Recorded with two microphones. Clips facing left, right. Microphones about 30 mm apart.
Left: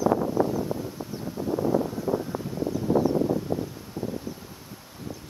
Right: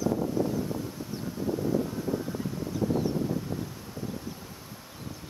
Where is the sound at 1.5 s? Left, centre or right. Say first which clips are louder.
Left 5 dB; left.